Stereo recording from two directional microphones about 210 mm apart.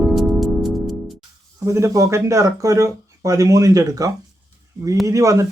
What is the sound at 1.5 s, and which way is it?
Speech, 15° right (ahead or behind).